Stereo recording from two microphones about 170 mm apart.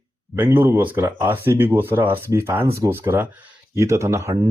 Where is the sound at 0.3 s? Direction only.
10° right (ahead or behind).